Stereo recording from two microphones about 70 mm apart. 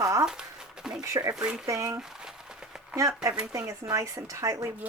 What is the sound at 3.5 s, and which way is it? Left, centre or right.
Speech, right.